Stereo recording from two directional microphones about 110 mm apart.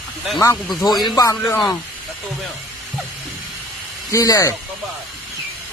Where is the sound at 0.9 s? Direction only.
40° left (ahead or behind).